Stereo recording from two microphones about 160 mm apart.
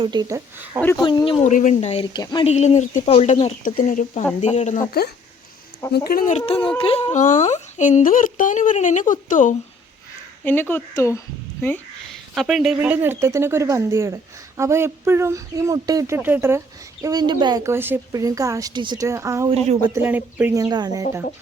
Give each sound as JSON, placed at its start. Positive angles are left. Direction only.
{"t": 0.0, "sound": "a woman's voice", "side_deg": -25}
{"t": 0.9, "sound": "speech", "side_deg": 30}
{"t": 1.5, "sound": "speech", "side_deg": 50}
{"t": 2.1, "sound": "speech", "side_deg": 25}
{"t": 2.5, "sound": "speech", "side_deg": 45}
{"t": 6.1, "sound": "speech", "side_deg": 65}
{"t": 6.3, "sound": "speech", "side_deg": 40}
{"t": 10.4, "sound": "speech", "side_deg": 10}
{"t": 12.3, "sound": "speech", "side_deg": 0}
{"t": 17.0, "sound": "a woman's voice", "side_deg": -25}
{"t": 19.5, "sound": "speech", "side_deg": -40}
{"t": 19.9, "sound": "a woman's voice", "side_deg": -10}